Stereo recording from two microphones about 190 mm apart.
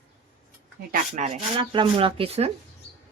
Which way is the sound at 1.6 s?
25° right (ahead or behind).